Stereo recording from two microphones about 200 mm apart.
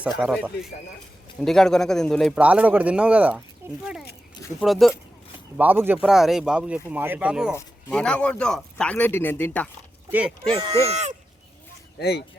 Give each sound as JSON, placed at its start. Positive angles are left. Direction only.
{"t": 0.2, "sound": "speech", "side_deg": 0}
{"t": 4.6, "sound": "speech", "side_deg": 0}
{"t": 10.1, "sound": "speech", "side_deg": -5}
{"t": 10.5, "sound": "speech", "side_deg": -30}
{"t": 11.9, "sound": "speech", "side_deg": 55}